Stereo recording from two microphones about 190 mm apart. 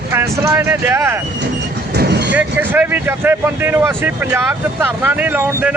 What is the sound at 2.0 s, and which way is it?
Vehicle, 60° right (ahead or behind).